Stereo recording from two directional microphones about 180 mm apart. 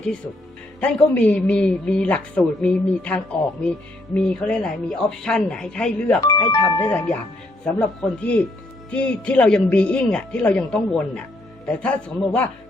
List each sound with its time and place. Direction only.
0.8 s a man's voice: 5° left (ahead or behind)
6.5 s speech: 25° left (ahead or behind)
6.7 s a man's voice: 10° left (ahead or behind)